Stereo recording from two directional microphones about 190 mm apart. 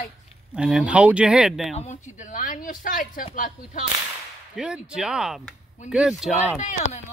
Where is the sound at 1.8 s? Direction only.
40° left (ahead or behind).